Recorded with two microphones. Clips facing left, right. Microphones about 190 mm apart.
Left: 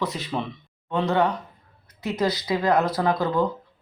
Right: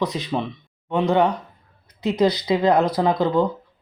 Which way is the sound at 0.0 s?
15° right (ahead or behind).